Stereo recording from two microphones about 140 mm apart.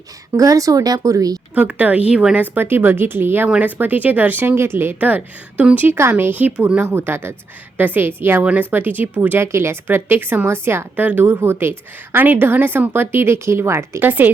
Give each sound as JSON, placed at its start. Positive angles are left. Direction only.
{"t": 0.3, "sound": "speech", "side_deg": -25}
{"t": 1.5, "sound": "a woman's voice", "side_deg": -10}